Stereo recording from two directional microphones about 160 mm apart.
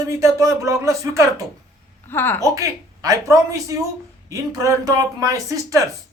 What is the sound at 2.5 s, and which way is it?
Speech, 20° right (ahead or behind).